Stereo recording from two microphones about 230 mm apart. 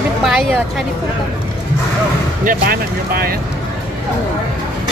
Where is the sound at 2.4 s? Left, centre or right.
Right.